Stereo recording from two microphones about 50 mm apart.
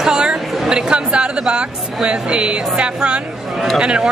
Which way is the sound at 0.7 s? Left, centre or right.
Centre.